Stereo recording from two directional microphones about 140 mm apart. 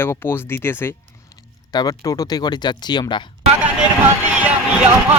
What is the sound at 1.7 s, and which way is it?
Speech, 30° left (ahead or behind).